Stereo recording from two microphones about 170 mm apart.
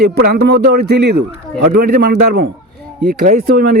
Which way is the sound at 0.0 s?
70° right (ahead or behind).